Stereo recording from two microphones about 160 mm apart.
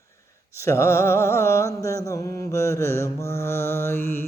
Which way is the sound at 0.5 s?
15° left (ahead or behind).